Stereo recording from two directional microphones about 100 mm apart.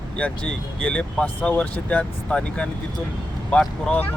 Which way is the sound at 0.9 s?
15° left (ahead or behind).